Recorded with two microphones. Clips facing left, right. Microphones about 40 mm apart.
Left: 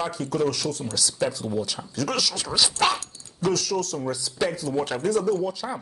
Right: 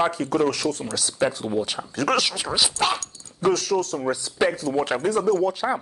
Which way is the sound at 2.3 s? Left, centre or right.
Centre.